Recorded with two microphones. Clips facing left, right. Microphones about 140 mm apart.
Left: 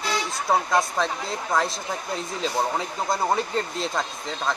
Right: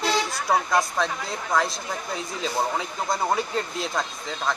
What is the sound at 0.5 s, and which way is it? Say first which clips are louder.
Speech: even; 25° left (ahead or behind).